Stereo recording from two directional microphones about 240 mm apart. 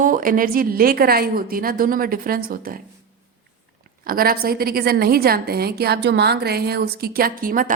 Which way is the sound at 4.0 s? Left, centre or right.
Right.